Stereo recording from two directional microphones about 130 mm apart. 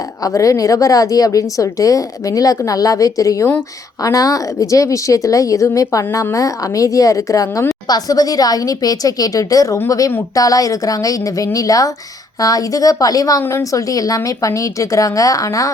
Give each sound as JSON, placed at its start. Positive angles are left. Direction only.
{"t": 0.3, "sound": "speech", "side_deg": 25}